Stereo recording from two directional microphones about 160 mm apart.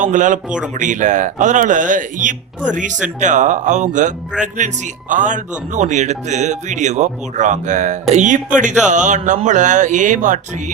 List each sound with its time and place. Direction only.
0.0 s speech: 50° right (ahead or behind)